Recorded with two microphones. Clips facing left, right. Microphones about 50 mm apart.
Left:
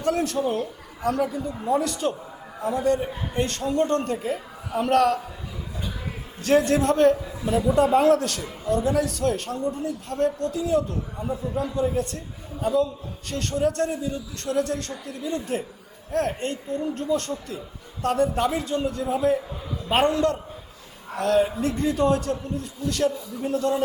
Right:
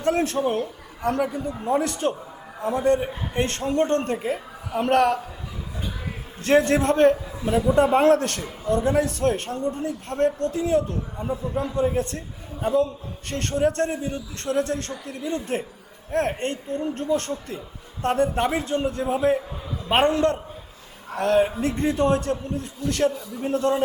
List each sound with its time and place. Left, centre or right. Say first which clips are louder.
0.0 s a man's voice: right 2 dB; right
6.4 s a man's voice: right 1 dB; right